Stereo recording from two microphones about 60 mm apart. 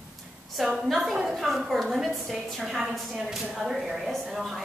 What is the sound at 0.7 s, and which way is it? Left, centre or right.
A woman's voice, centre.